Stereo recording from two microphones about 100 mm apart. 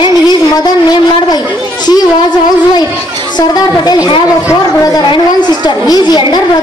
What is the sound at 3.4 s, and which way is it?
Speech, 45° left (ahead or behind).